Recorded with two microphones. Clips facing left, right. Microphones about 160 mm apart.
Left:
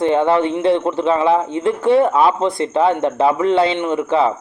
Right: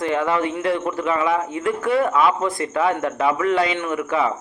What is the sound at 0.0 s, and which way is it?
Speech, 30° left (ahead or behind).